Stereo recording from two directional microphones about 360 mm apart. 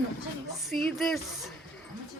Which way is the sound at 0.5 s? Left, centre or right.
Centre.